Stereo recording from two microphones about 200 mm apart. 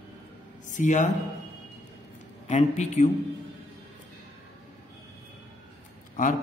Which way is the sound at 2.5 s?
35° left (ahead or behind).